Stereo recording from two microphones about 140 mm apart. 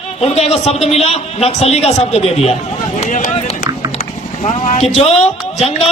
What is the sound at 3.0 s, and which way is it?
Run, 65° left (ahead or behind).